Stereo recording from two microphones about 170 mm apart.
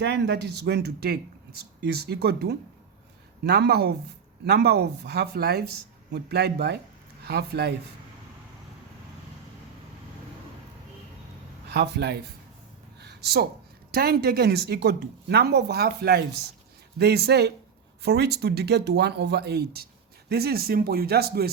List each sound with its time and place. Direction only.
0.0 s speech: 90° right; by 7.7 s 70° right (ahead or behind)
11.7 s speech: 75° right (ahead or behind)
13.0 s a sound: 75° right (ahead or behind)
13.9 s speech: 65° right (ahead or behind)